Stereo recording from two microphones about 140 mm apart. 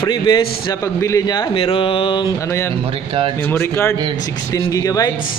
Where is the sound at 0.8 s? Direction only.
20° left (ahead or behind).